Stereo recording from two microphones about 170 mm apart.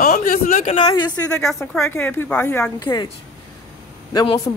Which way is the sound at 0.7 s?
25° left (ahead or behind).